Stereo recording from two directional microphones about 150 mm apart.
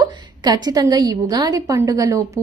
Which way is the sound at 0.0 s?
25° right (ahead or behind).